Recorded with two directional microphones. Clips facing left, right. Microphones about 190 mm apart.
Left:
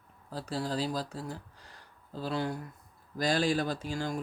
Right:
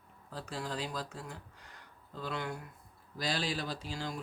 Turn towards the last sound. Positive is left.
turn(degrees=45)  # may be behind; listen again after turning